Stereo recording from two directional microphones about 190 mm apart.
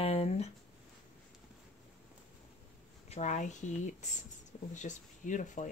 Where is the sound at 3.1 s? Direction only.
40° left (ahead or behind).